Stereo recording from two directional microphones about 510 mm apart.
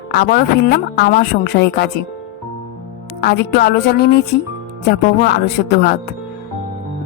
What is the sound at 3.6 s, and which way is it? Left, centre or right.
Speech, centre.